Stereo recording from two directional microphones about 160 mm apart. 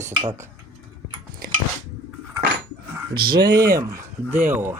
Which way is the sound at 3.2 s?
70° right (ahead or behind).